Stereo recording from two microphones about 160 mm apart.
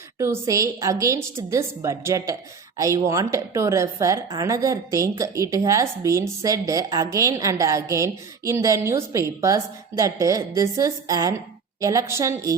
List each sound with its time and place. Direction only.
0.2 s a woman's voice: 20° right (ahead or behind)